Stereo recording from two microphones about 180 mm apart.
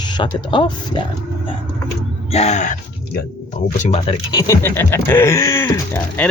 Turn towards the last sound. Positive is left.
turn(degrees=15)  # may be behind; listen again after turning